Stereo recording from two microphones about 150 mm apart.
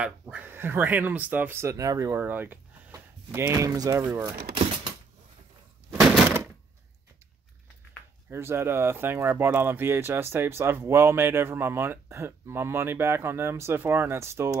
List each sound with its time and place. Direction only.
0.0 s speech: 10° right (ahead or behind)
5.9 s breaking: centre (ahead or behind)
8.3 s speech: 15° right (ahead or behind)